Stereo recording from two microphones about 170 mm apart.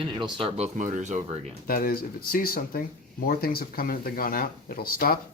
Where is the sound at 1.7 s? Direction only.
60° left (ahead or behind).